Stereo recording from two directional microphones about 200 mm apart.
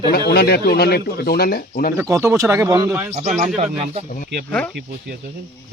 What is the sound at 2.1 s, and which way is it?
Speech, 15° right (ahead or behind).